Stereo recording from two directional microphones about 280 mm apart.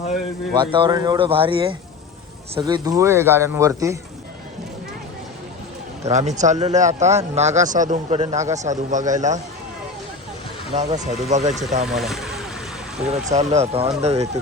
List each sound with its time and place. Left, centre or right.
0.5 s speech: centre
6.0 s a man's voice: right
10.8 s a man's voice: right
11.9 s speech: centre
13.1 s a man's voice: right